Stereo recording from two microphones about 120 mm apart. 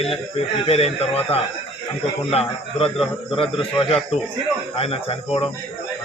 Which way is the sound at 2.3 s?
55° left (ahead or behind).